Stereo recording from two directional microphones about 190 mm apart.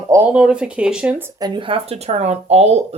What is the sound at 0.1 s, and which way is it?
Speech, 5° right (ahead or behind).